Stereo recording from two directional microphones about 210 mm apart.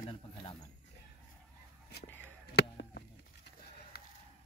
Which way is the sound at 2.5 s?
50° left (ahead or behind).